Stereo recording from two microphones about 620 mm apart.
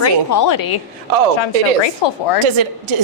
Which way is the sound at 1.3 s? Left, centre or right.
Left.